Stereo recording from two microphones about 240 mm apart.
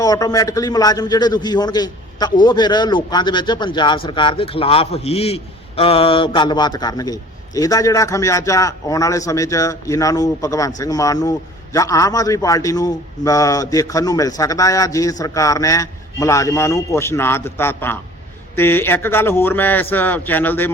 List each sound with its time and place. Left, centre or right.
0.0 s a man's voice: centre